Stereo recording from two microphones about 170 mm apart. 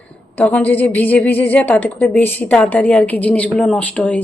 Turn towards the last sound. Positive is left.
turn(degrees=10)  # may be behind; listen again after turning